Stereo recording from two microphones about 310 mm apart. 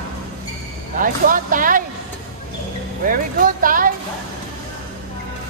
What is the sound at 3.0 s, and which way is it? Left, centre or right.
Speech, right.